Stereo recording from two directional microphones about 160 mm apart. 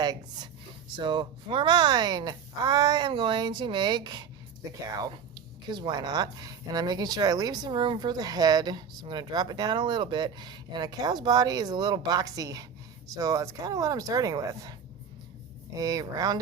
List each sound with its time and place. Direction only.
0.0 s a woman's voice: 25° right (ahead or behind)
15.8 s speech: 20° right (ahead or behind)